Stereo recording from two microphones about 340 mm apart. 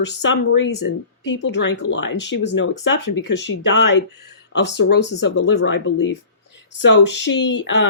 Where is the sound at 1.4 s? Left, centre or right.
Left.